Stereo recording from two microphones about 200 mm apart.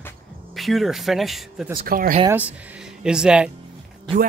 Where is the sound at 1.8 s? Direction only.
45° right (ahead or behind).